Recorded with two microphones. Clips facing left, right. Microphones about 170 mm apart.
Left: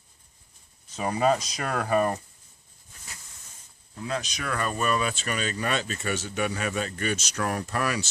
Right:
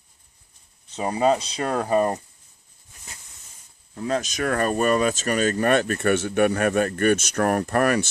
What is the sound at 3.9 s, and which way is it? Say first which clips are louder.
Speech: right 6 dB; 45° right (ahead or behind).